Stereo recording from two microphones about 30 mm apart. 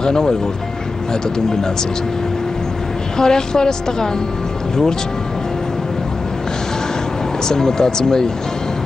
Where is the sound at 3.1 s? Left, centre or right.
Left.